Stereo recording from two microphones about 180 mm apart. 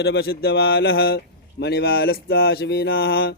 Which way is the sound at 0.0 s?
65° left (ahead or behind).